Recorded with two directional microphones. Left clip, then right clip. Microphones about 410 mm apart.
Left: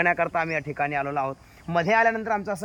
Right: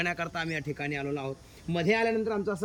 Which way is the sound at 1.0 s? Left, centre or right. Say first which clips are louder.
Left 7 dB; left.